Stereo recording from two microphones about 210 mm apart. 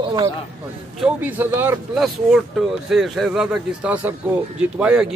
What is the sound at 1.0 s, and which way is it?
Speech, 10° right (ahead or behind).